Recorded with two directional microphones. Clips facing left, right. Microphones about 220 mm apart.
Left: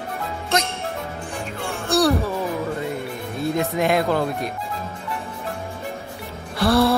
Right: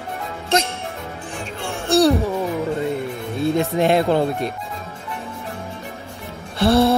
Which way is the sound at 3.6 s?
30° right (ahead or behind).